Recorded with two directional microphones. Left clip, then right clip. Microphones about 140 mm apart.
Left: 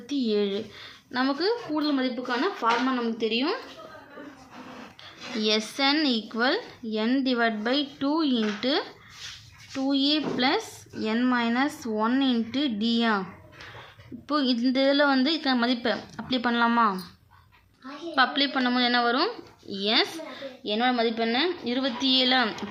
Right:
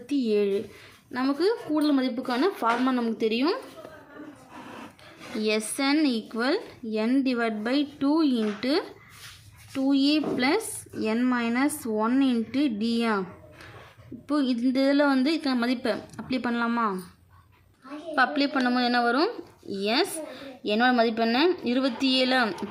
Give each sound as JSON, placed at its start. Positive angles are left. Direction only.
{"t": 0.1, "sound": "speech", "side_deg": -20}
{"t": 1.7, "sound": "a woman's voice", "side_deg": -50}
{"t": 5.4, "sound": "speech", "side_deg": -15}
{"t": 14.3, "sound": "speech", "side_deg": -15}
{"t": 18.1, "sound": "speech", "side_deg": -30}
{"t": 20.7, "sound": "speech", "side_deg": -50}